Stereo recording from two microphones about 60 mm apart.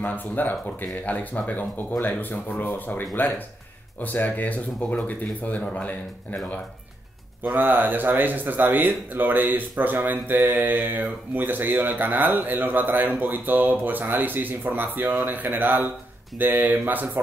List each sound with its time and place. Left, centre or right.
0.0 s speech: left
7.4 s speech: right